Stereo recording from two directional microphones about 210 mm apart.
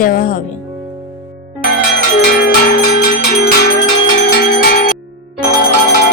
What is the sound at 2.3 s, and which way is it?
Bell, 45° left (ahead or behind).